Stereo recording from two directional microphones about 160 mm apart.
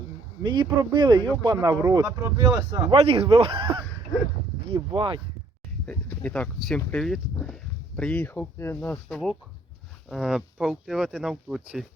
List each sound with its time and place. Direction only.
0.4 s speech: 30° right (ahead or behind)
3.0 s speech: 35° right (ahead or behind)
5.8 s speech: 10° left (ahead or behind)